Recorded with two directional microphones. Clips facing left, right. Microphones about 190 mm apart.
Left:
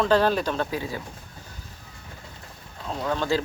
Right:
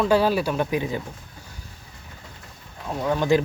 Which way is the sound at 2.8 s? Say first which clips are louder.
Right 4 dB; 15° right (ahead or behind).